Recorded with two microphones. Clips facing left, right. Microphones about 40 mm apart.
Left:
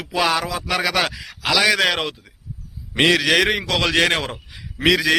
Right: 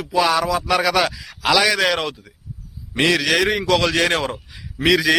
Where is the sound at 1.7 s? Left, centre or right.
Left.